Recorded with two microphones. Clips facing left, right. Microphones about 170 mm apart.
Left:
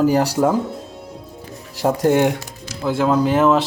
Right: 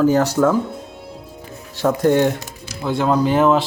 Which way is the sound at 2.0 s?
15° left (ahead or behind).